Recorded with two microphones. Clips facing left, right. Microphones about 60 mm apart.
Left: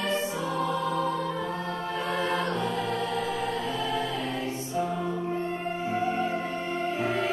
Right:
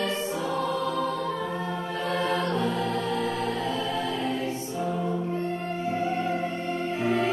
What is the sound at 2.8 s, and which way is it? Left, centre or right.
Music, centre.